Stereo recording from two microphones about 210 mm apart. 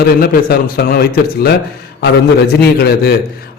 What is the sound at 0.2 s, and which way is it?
Speech, 45° left (ahead or behind).